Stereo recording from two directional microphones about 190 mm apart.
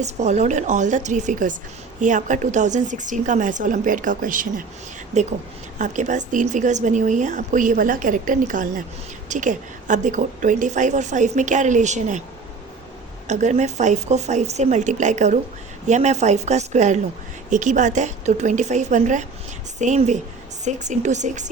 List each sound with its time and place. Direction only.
0.0 s speech: 35° right (ahead or behind)
13.2 s speech: 40° right (ahead or behind)